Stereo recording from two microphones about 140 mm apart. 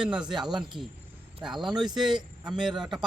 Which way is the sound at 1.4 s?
5° right (ahead or behind).